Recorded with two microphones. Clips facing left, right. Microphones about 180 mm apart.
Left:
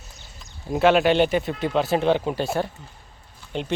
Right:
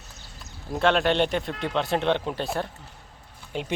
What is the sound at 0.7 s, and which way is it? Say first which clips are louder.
Speech: left 4 dB; 5° left (ahead or behind).